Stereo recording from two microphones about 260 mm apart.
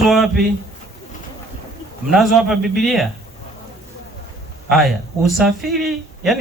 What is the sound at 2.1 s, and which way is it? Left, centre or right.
Speech, centre.